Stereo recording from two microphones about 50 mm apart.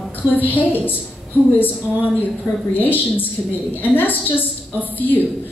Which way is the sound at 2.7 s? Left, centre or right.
Left.